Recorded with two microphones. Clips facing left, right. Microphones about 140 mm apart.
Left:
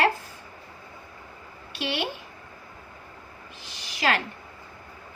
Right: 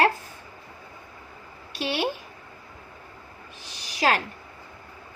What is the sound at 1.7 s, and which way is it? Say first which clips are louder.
Speech: right 2 dB; 40° right (ahead or behind).